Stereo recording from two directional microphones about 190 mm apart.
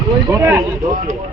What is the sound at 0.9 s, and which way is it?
Speech, 45° right (ahead or behind).